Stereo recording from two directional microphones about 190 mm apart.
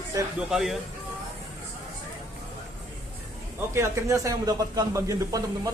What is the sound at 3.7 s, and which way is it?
Speech, 15° right (ahead or behind).